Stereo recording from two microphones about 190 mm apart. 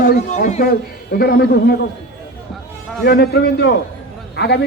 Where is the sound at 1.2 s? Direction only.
55° left (ahead or behind).